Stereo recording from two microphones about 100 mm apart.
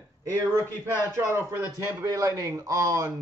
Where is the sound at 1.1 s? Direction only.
25° right (ahead or behind).